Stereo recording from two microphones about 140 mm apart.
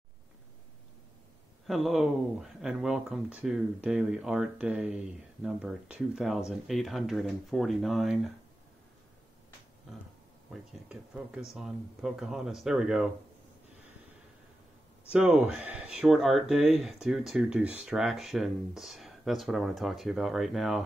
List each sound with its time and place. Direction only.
1.7 s speech: centre (ahead or behind)
10.5 s speech: 5° right (ahead or behind)
15.0 s speech: 5° right (ahead or behind)